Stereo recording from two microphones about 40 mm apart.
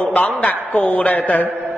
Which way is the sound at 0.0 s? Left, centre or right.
Left.